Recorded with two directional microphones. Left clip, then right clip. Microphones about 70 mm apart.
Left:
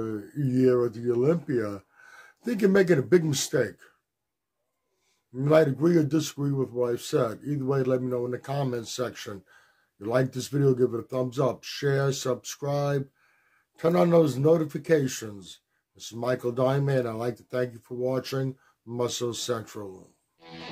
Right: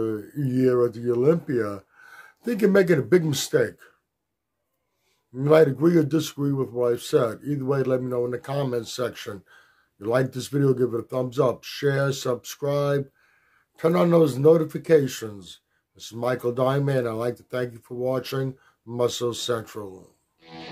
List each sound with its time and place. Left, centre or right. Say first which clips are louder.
0.0 s a man's voice: right 4 dB; right
5.3 s a man's voice: right 4 dB; right
20.3 s music: right 1 dB; centre